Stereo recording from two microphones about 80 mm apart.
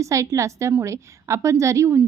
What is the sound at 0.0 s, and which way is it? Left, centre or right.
A woman's voice, right.